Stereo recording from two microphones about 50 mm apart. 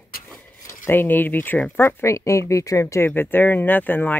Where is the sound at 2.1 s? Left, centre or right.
Left.